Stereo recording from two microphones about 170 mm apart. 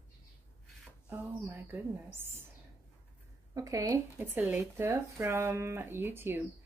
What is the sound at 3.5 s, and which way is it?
Speech, 20° right (ahead or behind).